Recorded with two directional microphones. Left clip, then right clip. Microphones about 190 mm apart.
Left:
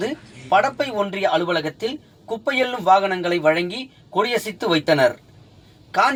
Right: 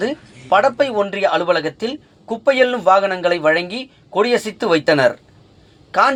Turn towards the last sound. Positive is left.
turn(degrees=-20)  # may be behind; listen again after turning